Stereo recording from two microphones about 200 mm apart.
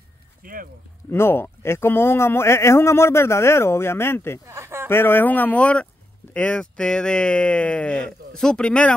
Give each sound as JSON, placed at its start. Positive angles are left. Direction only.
{"t": 0.4, "sound": "speech", "side_deg": -45}
{"t": 1.1, "sound": "a man's voice", "side_deg": 10}
{"t": 4.5, "sound": "a sound", "side_deg": -15}
{"t": 4.8, "sound": "a man's voice", "side_deg": 10}